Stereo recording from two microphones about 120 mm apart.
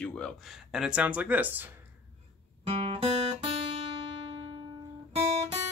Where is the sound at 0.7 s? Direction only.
5° right (ahead or behind).